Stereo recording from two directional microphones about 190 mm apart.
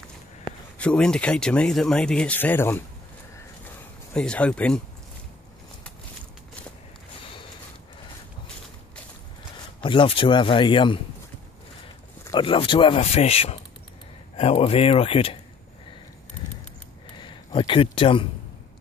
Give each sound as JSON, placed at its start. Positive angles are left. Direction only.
{"t": 0.7, "sound": "speech", "side_deg": 5}
{"t": 4.1, "sound": "speech", "side_deg": 5}
{"t": 9.8, "sound": "speech", "side_deg": 25}
{"t": 12.3, "sound": "speech", "side_deg": 25}
{"t": 17.2, "sound": "speech", "side_deg": 25}